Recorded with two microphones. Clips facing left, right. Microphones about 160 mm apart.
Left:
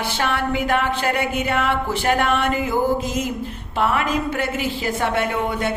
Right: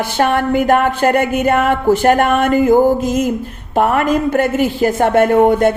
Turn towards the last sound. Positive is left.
turn(degrees=-45)  # may be behind; listen again after turning